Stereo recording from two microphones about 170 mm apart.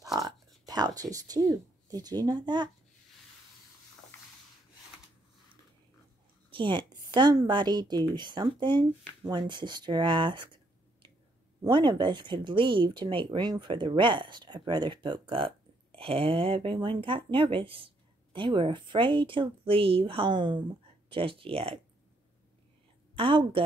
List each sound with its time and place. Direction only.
0.0 s a sound: 20° right (ahead or behind)
0.7 s speech: 20° right (ahead or behind)
6.5 s a woman's voice: 30° right (ahead or behind)
11.6 s speech: 25° right (ahead or behind)
23.1 s speech: 30° right (ahead or behind)